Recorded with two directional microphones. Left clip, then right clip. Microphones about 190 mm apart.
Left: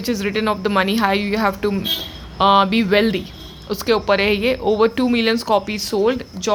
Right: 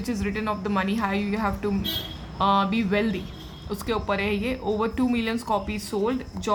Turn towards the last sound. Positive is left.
turn(degrees=35)  # may be behind; listen again after turning